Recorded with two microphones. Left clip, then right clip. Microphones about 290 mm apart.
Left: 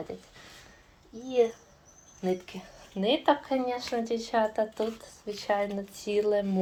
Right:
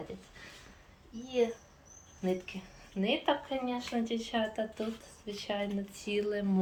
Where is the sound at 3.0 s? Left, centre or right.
Centre.